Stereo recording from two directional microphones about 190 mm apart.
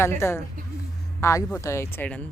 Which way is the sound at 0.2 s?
15° left (ahead or behind).